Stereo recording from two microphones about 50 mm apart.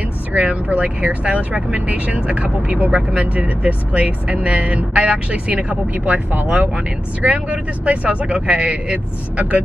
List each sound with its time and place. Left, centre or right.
0.3 s speech: right